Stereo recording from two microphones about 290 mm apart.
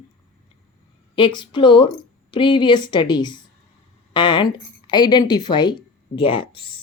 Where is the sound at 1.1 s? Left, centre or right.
Centre.